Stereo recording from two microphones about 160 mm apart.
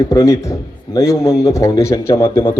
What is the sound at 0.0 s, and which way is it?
A man's voice, 20° left (ahead or behind).